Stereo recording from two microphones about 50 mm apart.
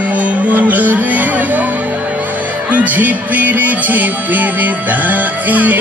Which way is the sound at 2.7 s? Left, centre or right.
Right.